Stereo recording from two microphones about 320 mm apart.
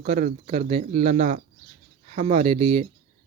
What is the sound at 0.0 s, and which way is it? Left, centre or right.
Speech, right.